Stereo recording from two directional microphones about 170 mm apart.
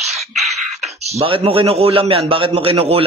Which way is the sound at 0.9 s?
35° right (ahead or behind).